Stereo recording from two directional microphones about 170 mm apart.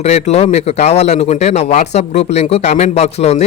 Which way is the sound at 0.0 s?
40° left (ahead or behind).